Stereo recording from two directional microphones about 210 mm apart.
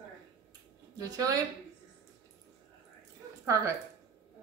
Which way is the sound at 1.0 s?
15° right (ahead or behind).